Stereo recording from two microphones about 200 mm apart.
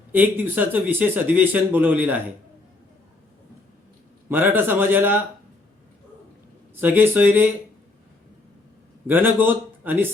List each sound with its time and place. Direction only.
0.1 s speech: 10° right (ahead or behind)
4.3 s speech: 10° right (ahead or behind)
6.7 s speech: 10° right (ahead or behind)
9.0 s speech: 10° right (ahead or behind)